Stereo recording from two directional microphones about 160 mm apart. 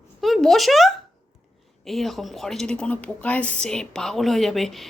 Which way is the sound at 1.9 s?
Centre (ahead or behind).